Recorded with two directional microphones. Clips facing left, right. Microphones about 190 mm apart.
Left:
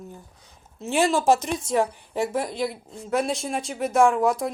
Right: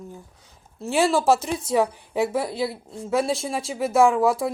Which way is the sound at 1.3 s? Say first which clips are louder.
Even; 10° right (ahead or behind).